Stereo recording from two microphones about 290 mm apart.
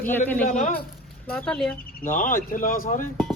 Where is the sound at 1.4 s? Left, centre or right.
Centre.